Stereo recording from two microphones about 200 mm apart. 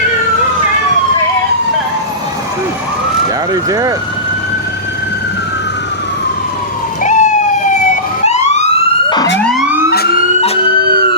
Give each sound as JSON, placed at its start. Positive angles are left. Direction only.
{"t": 3.5, "sound": "speech", "side_deg": -15}
{"t": 7.0, "sound": "emergency vehicle", "side_deg": 35}
{"t": 9.0, "sound": "emergency vehicle", "side_deg": 20}
{"t": 9.4, "sound": "emergency vehicle", "side_deg": 0}
{"t": 10.8, "sound": "a sound", "side_deg": -50}